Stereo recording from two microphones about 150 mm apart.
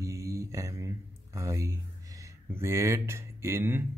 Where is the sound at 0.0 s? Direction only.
20° right (ahead or behind).